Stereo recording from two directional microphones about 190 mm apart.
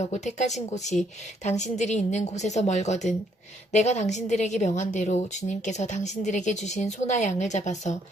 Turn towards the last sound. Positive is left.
turn(degrees=40)  # may be behind; listen again after turning